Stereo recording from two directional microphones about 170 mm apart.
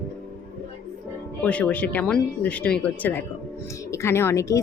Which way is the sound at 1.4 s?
5° left (ahead or behind).